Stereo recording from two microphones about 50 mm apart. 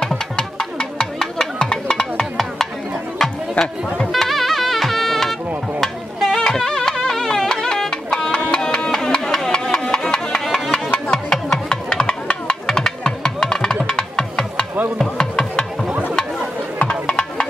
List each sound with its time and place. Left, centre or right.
0.4 s music: centre
5.8 s stir: centre
6.4 s music: centre
9.3 s a sound: centre
10.7 s music: centre
17.0 s music: centre